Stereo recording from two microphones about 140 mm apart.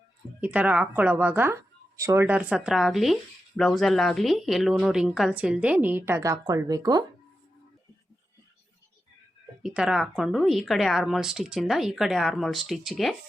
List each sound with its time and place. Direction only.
0.4 s a woman's voice: 10° right (ahead or behind); by 7.0 s 25° right (ahead or behind)
9.6 s speech: 5° right (ahead or behind)